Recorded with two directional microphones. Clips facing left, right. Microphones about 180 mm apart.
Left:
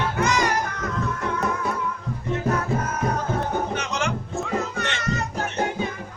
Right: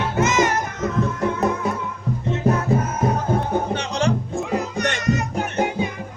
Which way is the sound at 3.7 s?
30° right (ahead or behind).